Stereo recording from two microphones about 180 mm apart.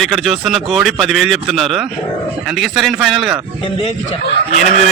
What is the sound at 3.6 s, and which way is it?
Speech, 30° left (ahead or behind).